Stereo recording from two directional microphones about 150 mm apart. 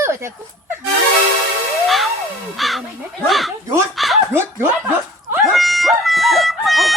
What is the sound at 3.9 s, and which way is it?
Chuckle, centre (ahead or behind).